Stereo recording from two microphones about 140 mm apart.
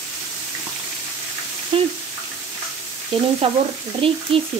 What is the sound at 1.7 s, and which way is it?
Frying, 40° right (ahead or behind).